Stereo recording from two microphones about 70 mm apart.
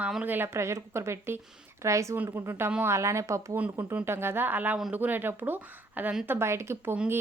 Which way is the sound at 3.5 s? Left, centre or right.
Right.